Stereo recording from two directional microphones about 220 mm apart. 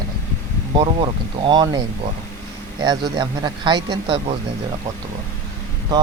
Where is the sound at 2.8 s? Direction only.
20° right (ahead or behind).